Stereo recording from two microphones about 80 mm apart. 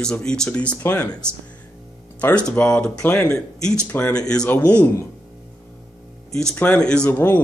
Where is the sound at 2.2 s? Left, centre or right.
Centre.